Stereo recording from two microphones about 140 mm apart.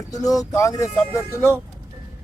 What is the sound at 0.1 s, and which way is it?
Speech, 25° left (ahead or behind).